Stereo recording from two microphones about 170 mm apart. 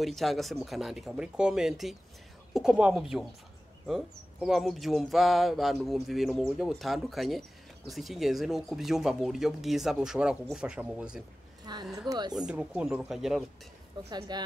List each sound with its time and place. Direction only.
0.0 s speech: centre (ahead or behind)
11.6 s speech: 25° right (ahead or behind)
12.4 s speech: 5° right (ahead or behind)
14.1 s speech: 25° right (ahead or behind)